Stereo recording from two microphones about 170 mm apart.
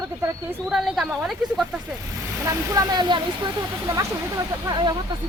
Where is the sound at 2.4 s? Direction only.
20° right (ahead or behind).